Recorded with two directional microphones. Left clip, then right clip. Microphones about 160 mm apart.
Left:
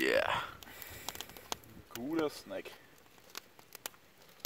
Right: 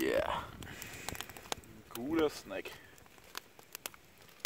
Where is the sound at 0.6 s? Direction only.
15° left (ahead or behind).